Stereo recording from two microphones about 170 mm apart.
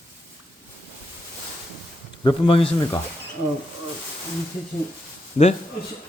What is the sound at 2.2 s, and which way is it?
Speech, 30° left (ahead or behind).